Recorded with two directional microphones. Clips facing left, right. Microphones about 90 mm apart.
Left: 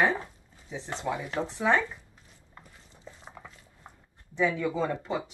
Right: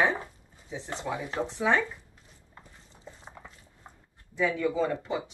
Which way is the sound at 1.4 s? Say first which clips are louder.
Right 2 dB; 20° left (ahead or behind).